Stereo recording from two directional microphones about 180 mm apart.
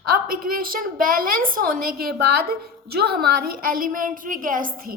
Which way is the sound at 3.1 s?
60° right (ahead or behind).